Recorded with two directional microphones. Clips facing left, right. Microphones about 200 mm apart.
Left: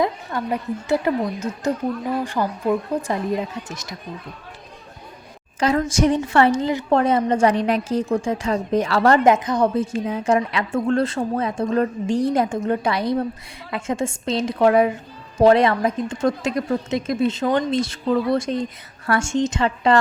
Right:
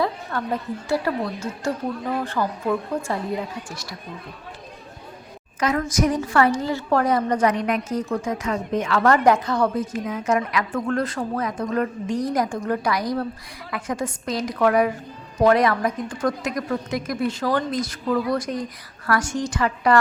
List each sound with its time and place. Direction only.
0.0 s a woman's voice: 15° left (ahead or behind)
5.5 s a woman's voice: 30° left (ahead or behind)